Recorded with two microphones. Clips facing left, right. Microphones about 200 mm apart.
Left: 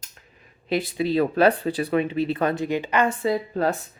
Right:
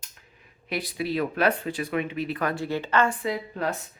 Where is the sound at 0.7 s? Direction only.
25° left (ahead or behind).